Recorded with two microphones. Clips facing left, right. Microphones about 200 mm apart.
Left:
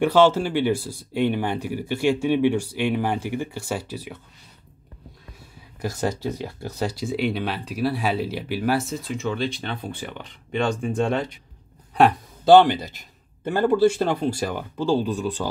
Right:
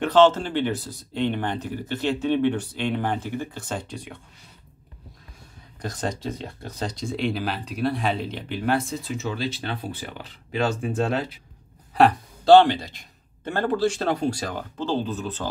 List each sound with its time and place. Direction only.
0.0 s speech: 10° left (ahead or behind)
5.8 s speech: 5° left (ahead or behind)